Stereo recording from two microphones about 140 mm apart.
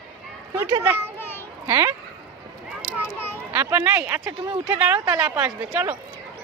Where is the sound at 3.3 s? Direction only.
15° right (ahead or behind).